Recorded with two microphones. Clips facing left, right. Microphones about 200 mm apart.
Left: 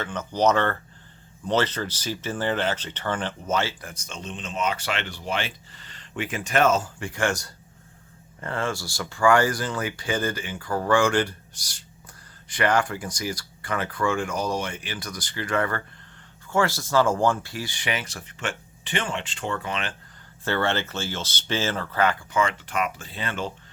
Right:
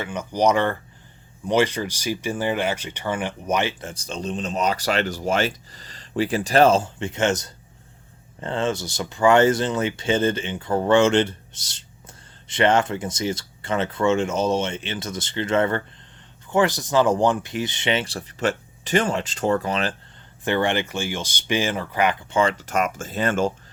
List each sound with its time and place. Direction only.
0.0 s speech: 10° right (ahead or behind); by 20.0 s 35° right (ahead or behind)
20.4 s speech: 15° right (ahead or behind)
22.3 s speech: 30° right (ahead or behind)